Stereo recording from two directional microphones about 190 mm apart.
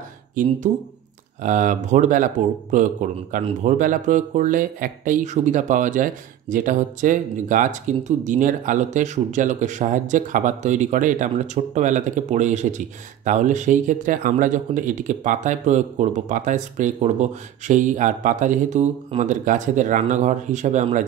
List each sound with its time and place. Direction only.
0.7 s speech: 35° right (ahead or behind)